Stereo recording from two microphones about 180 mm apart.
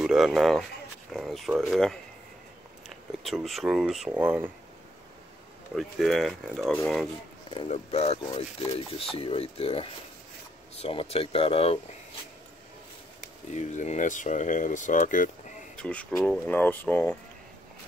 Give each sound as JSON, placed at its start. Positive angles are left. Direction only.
{"t": 0.0, "sound": "speech", "side_deg": 0}
{"t": 3.3, "sound": "speech", "side_deg": 0}
{"t": 5.8, "sound": "speech", "side_deg": 0}
{"t": 7.5, "sound": "speech", "side_deg": 35}
{"t": 13.5, "sound": "speech", "side_deg": 40}
{"t": 15.7, "sound": "speech", "side_deg": 5}